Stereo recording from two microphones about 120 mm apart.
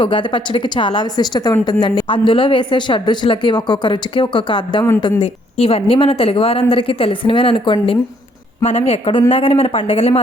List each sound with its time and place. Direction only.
0.0 s a woman's voice: 45° left (ahead or behind)
1.8 s a man's voice: 45° left (ahead or behind)
5.2 s a man's voice: 55° left (ahead or behind)
8.6 s speech: 60° left (ahead or behind)
9.3 s a man's voice: 50° left (ahead or behind)